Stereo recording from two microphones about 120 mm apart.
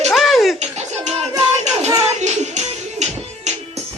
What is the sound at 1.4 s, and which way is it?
Child singing, 65° right (ahead or behind).